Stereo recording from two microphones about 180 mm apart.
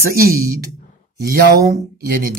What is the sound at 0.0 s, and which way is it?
Speech, 55° right (ahead or behind).